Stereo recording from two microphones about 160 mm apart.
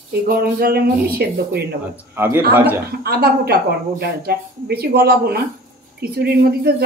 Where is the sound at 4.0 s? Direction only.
75° right (ahead or behind).